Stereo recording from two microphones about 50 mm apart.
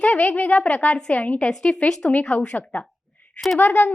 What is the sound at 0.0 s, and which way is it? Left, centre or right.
A woman's voice, left.